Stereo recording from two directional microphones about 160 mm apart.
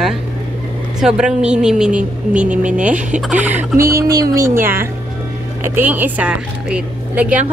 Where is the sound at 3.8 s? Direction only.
20° right (ahead or behind).